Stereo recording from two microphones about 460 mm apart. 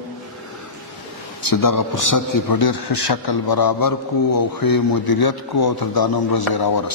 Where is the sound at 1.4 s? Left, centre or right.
Left.